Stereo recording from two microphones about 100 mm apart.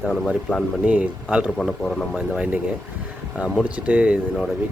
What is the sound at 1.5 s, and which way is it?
Speech, 10° left (ahead or behind).